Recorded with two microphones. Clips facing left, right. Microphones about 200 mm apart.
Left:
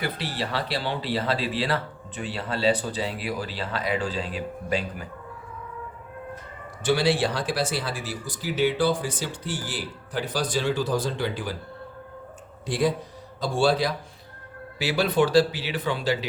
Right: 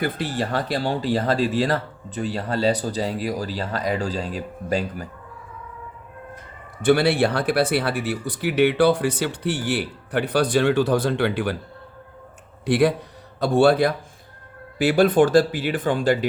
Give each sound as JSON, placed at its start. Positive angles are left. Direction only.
{"t": 0.0, "sound": "speech", "side_deg": -50}
{"t": 6.8, "sound": "speech", "side_deg": -60}
{"t": 12.6, "sound": "speech", "side_deg": -65}